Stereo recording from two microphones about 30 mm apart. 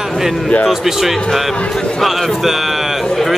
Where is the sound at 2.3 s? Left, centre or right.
Centre.